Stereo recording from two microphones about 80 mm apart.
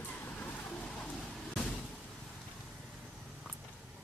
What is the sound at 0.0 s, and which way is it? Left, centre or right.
Vehicle, left.